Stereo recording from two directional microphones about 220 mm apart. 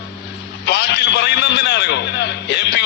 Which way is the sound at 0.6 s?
50° left (ahead or behind).